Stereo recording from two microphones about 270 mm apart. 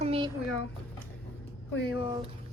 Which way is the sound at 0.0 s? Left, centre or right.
Right.